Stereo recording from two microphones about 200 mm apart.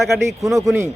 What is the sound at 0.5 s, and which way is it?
Speech, 15° right (ahead or behind).